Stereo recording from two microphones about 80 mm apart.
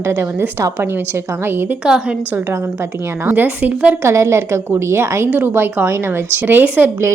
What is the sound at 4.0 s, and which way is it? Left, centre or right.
A woman's voice, right.